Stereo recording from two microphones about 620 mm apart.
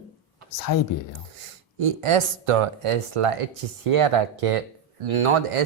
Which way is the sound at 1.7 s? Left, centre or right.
Right.